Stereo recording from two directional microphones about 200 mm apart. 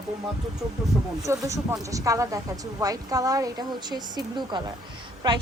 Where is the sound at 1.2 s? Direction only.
15° right (ahead or behind).